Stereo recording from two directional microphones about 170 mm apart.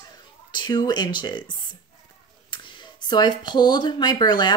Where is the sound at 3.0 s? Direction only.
25° left (ahead or behind).